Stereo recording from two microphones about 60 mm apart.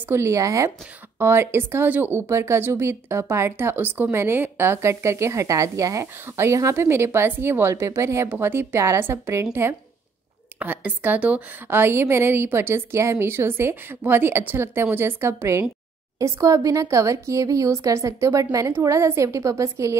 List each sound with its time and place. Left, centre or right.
0.1 s speech: right
1.2 s a woman's voice: right
4.8 s speech: right
6.2 s a woman's voice: right
8.3 s a woman's voice: right
10.6 s a woman's voice: right
11.6 s a woman's voice: right
16.2 s speech: right
18.7 s speech: right